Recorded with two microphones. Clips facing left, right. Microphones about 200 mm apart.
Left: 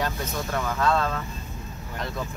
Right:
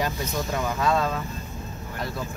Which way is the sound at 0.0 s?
15° right (ahead or behind).